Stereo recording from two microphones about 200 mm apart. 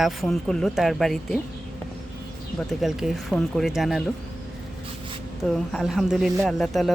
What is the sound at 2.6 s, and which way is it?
Speech, centre (ahead or behind).